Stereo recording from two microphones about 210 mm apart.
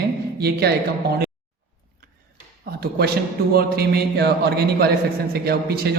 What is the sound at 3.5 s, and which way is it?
A man's voice, 45° right (ahead or behind).